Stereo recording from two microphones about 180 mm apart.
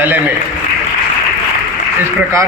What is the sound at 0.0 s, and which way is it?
Speech, 10° right (ahead or behind).